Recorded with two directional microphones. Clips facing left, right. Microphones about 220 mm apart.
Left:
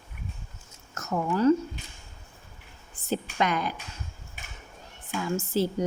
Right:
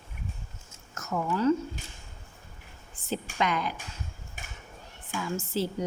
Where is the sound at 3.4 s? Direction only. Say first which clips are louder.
Left 1 dB; 45° left (ahead or behind).